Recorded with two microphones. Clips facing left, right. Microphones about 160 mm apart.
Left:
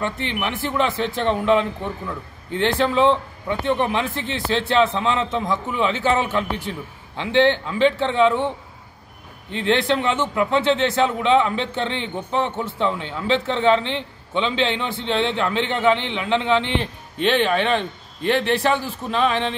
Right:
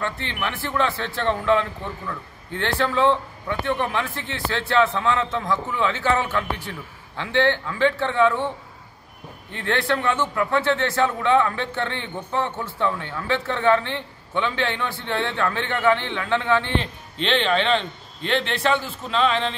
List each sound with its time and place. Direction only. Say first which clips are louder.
0.0 s a man's voice: left 3 dB; 15° left (ahead or behind)
16.8 s a man's voice: left 6 dB; 10° left (ahead or behind)